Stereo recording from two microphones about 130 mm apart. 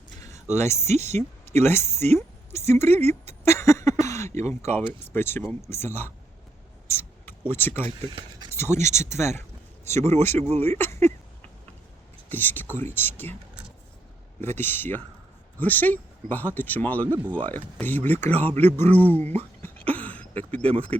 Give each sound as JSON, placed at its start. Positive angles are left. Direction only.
{"t": 0.2, "sound": "a sound", "side_deg": 25}
{"t": 0.4, "sound": "speech", "side_deg": -60}
{"t": 1.5, "sound": "speech", "side_deg": 20}
{"t": 3.0, "sound": "a sound", "side_deg": 20}
{"t": 4.0, "sound": "throat clearing", "side_deg": 20}
{"t": 4.9, "sound": "speech", "side_deg": 15}
{"t": 6.8, "sound": "a sound", "side_deg": 15}
{"t": 8.8, "sound": "speech", "side_deg": -60}
{"t": 9.1, "sound": "speech", "side_deg": 20}
{"t": 12.3, "sound": "speech", "side_deg": 15}
{"t": 14.4, "sound": "speech", "side_deg": 15}
{"t": 19.6, "sound": "throat clearing", "side_deg": 10}